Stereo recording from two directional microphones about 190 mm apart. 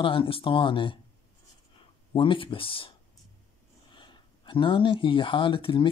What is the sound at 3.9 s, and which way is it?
Speech, 25° left (ahead or behind).